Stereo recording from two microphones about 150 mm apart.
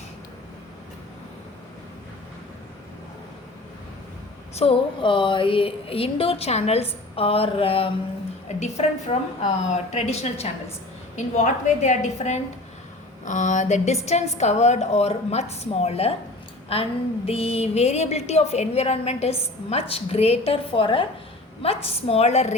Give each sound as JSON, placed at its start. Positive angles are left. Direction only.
{"t": 4.5, "sound": "a woman's voice", "side_deg": 40}